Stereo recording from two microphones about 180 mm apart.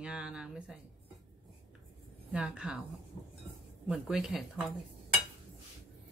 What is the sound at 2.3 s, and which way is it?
Speech, 5° right (ahead or behind).